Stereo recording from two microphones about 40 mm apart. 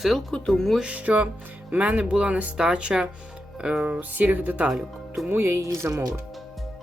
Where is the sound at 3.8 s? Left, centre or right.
Right.